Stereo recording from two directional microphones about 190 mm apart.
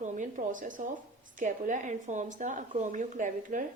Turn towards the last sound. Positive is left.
turn(degrees=-45)  # may be behind; listen again after turning